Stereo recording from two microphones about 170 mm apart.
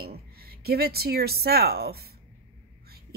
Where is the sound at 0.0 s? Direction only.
65° right (ahead or behind).